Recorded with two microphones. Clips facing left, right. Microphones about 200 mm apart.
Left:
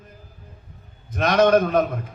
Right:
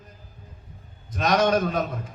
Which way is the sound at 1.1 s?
50° left (ahead or behind).